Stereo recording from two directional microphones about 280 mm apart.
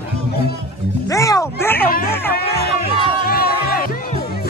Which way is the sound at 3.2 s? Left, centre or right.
Left.